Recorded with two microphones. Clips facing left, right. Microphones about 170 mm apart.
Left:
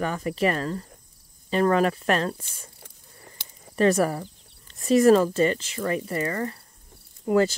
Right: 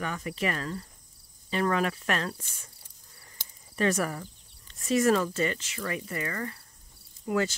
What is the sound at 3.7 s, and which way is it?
Speech, 35° left (ahead or behind).